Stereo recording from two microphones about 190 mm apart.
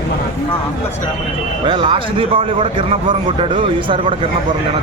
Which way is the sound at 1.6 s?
25° right (ahead or behind).